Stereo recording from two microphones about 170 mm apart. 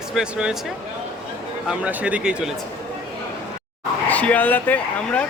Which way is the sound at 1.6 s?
10° right (ahead or behind).